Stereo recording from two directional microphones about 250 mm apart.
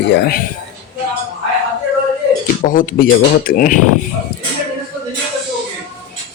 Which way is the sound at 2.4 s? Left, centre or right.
Left.